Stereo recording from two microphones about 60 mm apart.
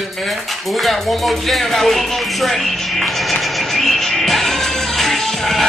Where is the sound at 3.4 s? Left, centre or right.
Centre.